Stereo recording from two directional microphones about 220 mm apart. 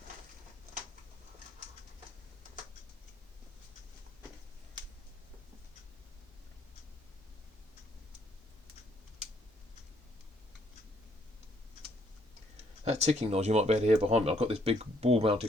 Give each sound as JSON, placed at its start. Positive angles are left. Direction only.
{"t": 12.8, "sound": "speech", "side_deg": -30}